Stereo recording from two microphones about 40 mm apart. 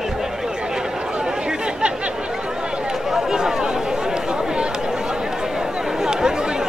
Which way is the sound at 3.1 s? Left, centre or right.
Centre.